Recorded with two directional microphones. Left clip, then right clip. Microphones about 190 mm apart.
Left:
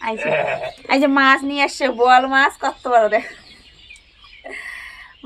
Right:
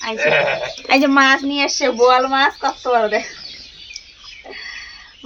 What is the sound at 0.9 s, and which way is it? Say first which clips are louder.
Speech: right 3 dB; 25° left (ahead or behind).